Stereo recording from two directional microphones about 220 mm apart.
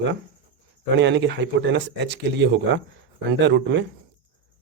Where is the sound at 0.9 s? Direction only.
55° right (ahead or behind).